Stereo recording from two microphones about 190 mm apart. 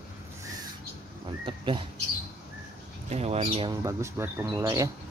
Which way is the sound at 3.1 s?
35° right (ahead or behind).